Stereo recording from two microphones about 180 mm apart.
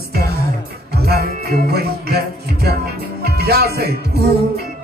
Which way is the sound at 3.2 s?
65° right (ahead or behind).